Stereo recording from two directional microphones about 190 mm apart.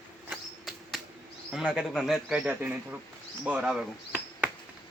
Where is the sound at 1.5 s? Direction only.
Centre (ahead or behind).